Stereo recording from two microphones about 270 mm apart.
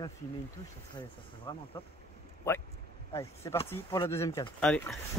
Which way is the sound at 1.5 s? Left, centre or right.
Centre.